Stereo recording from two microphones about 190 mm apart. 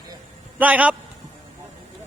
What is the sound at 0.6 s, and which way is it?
Speech, 5° right (ahead or behind).